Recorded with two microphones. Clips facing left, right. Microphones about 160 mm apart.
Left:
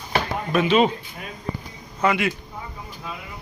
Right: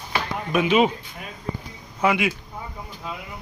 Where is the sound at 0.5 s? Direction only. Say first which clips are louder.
Left 1 dB; 10° right (ahead or behind).